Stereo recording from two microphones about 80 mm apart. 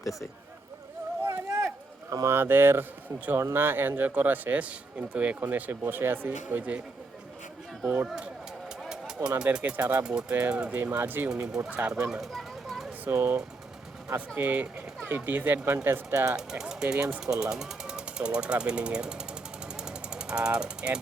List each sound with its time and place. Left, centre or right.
1.2 s a sound: right
2.2 s speech: right
8.0 s speech: centre
8.8 s a sound: centre
9.4 s speech: centre
10.8 s speech: right
12.0 s a sound: centre
13.1 s speech: right
16.3 s speech: centre
17.4 s jackhammer: centre